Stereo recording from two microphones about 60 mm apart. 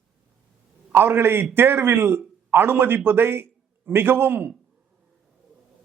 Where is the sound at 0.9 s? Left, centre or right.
Right.